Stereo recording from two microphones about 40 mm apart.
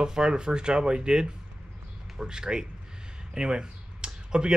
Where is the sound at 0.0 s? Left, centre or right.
Centre.